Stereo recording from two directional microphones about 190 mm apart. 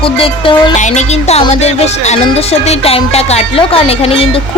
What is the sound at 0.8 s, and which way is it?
Speech, 40° left (ahead or behind).